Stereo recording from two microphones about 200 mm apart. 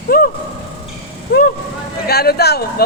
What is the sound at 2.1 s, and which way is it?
Speech, 50° left (ahead or behind).